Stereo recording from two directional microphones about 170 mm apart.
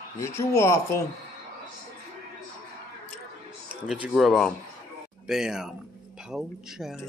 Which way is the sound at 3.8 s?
5° right (ahead or behind).